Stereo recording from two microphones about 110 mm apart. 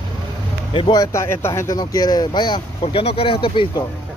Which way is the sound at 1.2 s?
25° left (ahead or behind).